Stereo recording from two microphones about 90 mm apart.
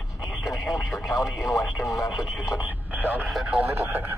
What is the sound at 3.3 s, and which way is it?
Radio, 5° right (ahead or behind).